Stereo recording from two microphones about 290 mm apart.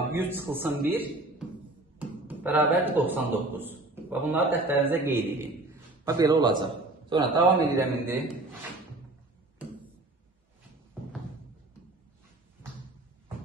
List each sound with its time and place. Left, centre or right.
0.2 s speech: centre
2.0 s a man's voice: centre